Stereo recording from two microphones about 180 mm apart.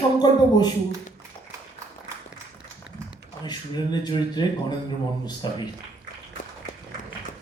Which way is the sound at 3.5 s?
25° left (ahead or behind).